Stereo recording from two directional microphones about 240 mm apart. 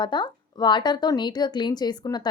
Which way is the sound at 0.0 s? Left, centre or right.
Centre.